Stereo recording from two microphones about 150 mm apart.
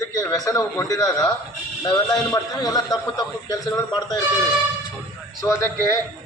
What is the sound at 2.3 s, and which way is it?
A man's voice, 25° left (ahead or behind).